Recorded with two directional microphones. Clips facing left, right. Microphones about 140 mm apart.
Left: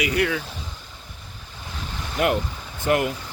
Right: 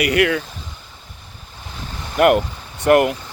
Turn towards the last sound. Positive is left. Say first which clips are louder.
# right 8 dB
turn(degrees=-65)  # may be behind; listen again after turning